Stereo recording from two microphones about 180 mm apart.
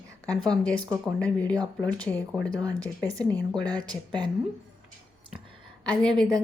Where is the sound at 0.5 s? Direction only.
5° left (ahead or behind).